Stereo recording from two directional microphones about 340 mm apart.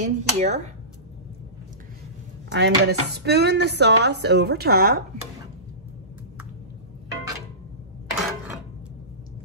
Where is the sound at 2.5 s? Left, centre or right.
Right.